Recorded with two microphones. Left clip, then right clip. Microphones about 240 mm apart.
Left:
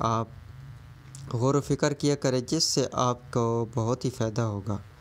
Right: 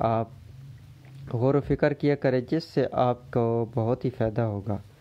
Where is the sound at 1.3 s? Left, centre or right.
Right.